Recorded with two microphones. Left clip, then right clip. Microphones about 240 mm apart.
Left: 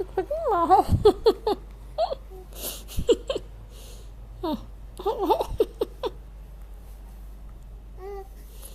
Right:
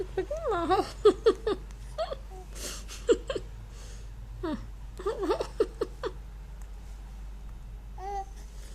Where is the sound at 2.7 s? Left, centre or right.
Right.